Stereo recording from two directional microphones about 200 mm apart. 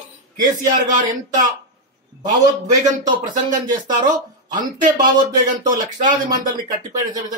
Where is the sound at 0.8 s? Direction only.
40° right (ahead or behind).